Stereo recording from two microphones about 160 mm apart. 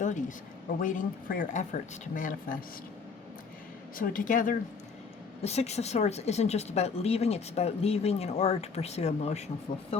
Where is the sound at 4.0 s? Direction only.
60° left (ahead or behind).